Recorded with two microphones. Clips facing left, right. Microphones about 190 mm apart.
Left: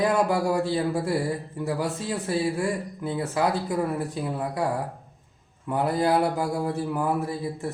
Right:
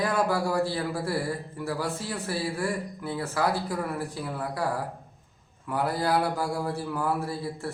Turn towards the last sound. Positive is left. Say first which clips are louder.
# left 3 dB
turn(degrees=20)  # may be behind; listen again after turning